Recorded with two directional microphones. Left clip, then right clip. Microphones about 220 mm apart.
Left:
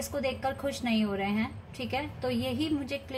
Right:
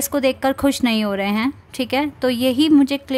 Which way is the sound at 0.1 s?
45° right (ahead or behind).